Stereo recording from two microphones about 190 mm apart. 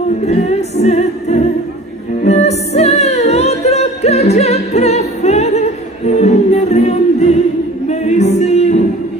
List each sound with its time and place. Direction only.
0.2 s music: 35° left (ahead or behind)